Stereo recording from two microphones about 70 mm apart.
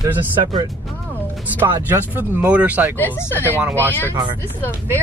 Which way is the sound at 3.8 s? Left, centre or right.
Left.